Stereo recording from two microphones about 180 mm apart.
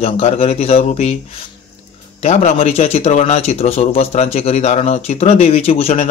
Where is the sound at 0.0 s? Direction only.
35° left (ahead or behind).